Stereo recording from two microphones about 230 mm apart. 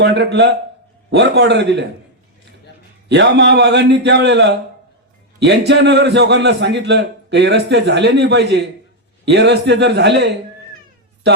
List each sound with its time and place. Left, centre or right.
0.0 s a man's voice: right
3.1 s a man's voice: right